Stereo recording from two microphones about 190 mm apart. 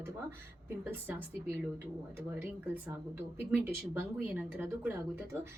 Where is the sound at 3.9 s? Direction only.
10° right (ahead or behind).